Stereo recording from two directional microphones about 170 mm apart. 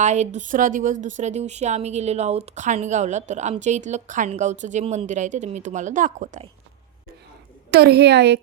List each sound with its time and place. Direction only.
0.0 s speech: 45° right (ahead or behind)
7.7 s a woman's voice: 75° right (ahead or behind)